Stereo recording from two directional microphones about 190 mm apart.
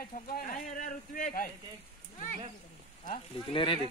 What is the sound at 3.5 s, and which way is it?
Speech, 25° left (ahead or behind).